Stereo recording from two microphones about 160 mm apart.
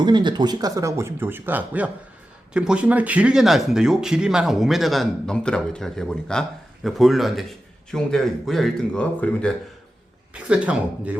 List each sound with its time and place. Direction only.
0.0 s speech: 30° right (ahead or behind); by 9.6 s 5° left (ahead or behind)
10.3 s speech: 5° right (ahead or behind)